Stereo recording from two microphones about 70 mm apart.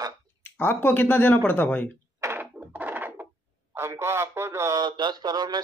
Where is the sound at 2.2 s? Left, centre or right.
Right.